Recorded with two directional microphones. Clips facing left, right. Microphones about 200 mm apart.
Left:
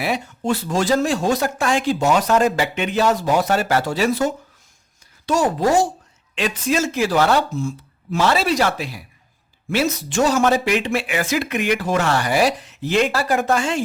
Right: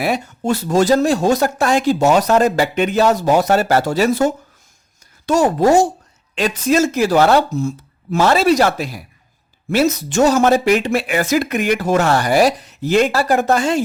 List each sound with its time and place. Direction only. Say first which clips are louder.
0.0 s speech: right 3 dB; 45° right (ahead or behind)